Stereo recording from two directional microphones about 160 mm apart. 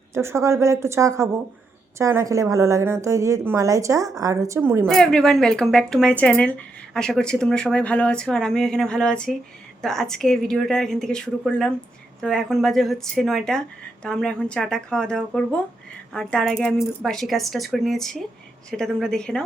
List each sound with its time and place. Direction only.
0.1 s a woman's voice: 15° right (ahead or behind)
4.9 s speech: 5° left (ahead or behind)